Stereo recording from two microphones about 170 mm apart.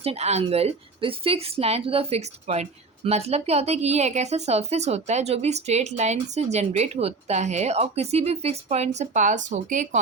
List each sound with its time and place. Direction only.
0.0 s a woman's voice: 35° right (ahead or behind)